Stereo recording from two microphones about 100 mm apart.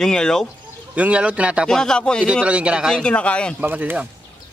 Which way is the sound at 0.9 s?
10° right (ahead or behind).